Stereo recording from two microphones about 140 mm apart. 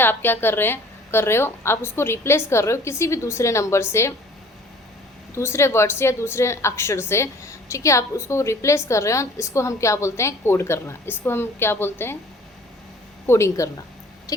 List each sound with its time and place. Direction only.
0.0 s a woman's voice: 15° left (ahead or behind)
5.3 s a woman's voice: 20° left (ahead or behind)
13.2 s a woman's voice: 20° left (ahead or behind)
14.3 s rodents: 25° left (ahead or behind)